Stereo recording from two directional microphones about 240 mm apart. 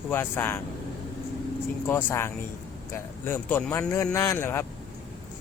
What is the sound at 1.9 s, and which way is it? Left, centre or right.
Speech, centre.